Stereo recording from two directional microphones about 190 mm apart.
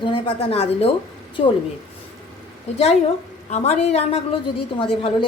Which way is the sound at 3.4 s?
35° left (ahead or behind).